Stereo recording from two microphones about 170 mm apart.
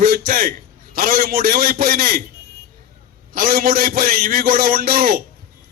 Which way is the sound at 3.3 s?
55° right (ahead or behind).